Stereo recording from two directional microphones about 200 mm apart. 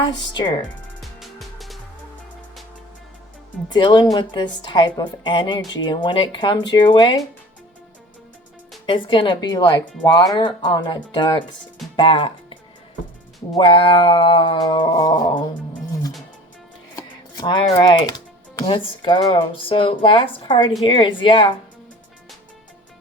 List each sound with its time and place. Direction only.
1.2 s music: centre (ahead or behind)
3.7 s a woman's voice: 25° left (ahead or behind)
8.9 s a woman's voice: 25° left (ahead or behind)
13.6 s a woman's voice: 25° left (ahead or behind)
16.9 s a sound: 20° left (ahead or behind)
18.6 s a woman's voice: 25° left (ahead or behind)